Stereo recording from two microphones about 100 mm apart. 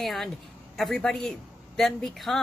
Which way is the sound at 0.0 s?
Centre (ahead or behind).